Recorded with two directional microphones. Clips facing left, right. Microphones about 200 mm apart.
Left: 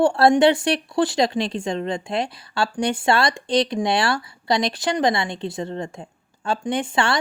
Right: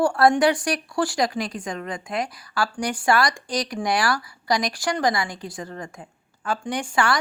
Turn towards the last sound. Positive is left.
turn(degrees=25)  # may be behind; listen again after turning